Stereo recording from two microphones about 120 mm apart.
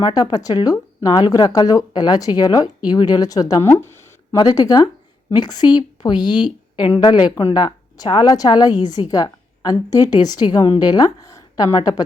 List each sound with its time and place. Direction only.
0.0 s a woman's voice: 35° left (ahead or behind)
4.4 s a woman's voice: 30° left (ahead or behind)